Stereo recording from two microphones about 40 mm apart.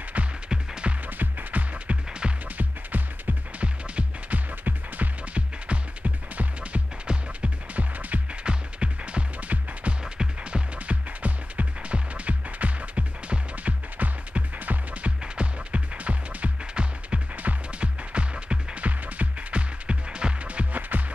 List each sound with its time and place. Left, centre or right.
0.5 s music: right
1.0 s music: right
3.6 s music: right
4.6 s music: right
16.8 s music: right
20.9 s music: right